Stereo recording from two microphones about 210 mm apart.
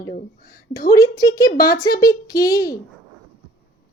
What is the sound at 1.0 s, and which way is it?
Speech, 15° left (ahead or behind).